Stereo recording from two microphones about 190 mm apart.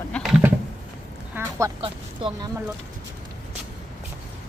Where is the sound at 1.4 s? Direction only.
10° right (ahead or behind).